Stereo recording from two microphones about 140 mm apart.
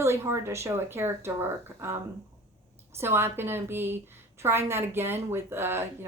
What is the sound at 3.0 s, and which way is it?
A woman's voice, 15° right (ahead or behind).